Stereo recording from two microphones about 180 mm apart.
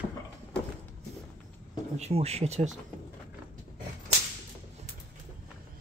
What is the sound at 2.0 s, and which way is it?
Speech, 35° right (ahead or behind).